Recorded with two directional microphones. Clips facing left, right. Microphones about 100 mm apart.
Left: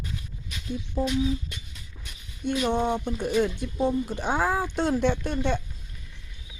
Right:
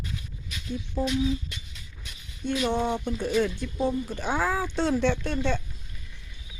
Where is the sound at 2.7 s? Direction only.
15° left (ahead or behind).